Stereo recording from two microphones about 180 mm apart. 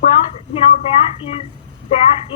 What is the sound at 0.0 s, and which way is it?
Speech, 35° left (ahead or behind).